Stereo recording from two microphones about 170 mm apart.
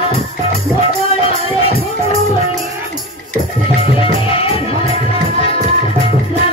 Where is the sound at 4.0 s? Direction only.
35° left (ahead or behind).